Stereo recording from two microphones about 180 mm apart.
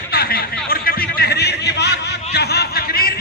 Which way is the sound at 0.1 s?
55° left (ahead or behind).